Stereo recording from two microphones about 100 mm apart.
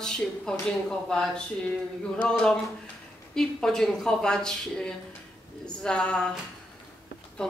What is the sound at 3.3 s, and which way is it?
Speech, 5° left (ahead or behind).